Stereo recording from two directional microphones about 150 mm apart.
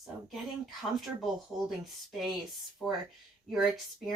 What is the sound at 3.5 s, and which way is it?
Speech, centre (ahead or behind).